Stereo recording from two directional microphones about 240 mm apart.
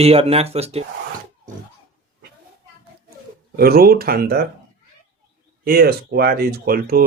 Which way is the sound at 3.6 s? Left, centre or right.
Right.